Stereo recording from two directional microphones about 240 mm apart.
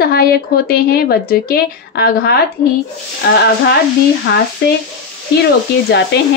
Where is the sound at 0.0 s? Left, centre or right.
Left.